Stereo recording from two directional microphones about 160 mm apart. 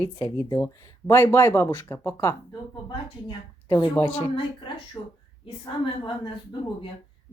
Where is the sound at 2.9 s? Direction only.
30° left (ahead or behind).